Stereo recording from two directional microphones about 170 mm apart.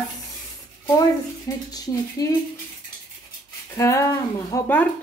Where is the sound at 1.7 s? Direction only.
20° left (ahead or behind).